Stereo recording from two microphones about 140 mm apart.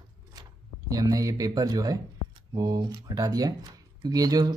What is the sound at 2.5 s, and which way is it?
Speech, 30° right (ahead or behind).